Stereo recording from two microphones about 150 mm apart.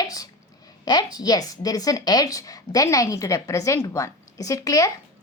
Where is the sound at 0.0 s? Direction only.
25° left (ahead or behind).